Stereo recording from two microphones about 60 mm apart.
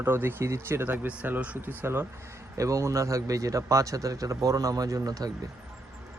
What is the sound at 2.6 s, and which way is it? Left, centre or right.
A man's voice, right.